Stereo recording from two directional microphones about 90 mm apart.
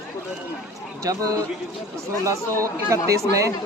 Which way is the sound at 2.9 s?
35° right (ahead or behind).